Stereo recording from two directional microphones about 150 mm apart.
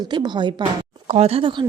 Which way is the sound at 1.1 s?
40° right (ahead or behind).